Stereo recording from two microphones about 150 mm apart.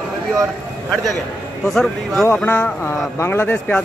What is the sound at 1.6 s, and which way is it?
Speech, 5° left (ahead or behind).